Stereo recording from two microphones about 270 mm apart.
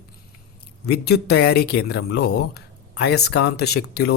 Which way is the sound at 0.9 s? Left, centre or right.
Left.